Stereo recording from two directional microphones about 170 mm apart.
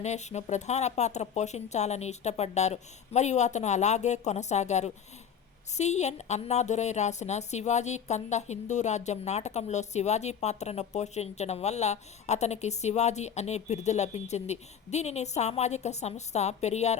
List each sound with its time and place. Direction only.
0.0 s a woman's voice: 40° left (ahead or behind)